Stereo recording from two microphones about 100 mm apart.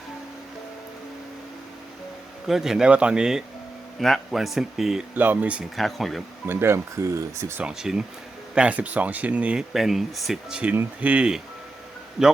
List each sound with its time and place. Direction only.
2.5 s speech: 5° right (ahead or behind)
5.1 s speech: 15° right (ahead or behind)
5.7 s speech: centre (ahead or behind)
6.4 s speech: 25° right (ahead or behind)
7.6 s speech: 5° right (ahead or behind)
9.7 s speech: centre (ahead or behind)
10.6 s speech: 15° right (ahead or behind)